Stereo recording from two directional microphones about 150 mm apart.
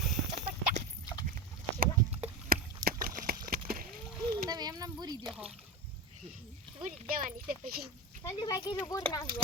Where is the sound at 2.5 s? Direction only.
75° right (ahead or behind).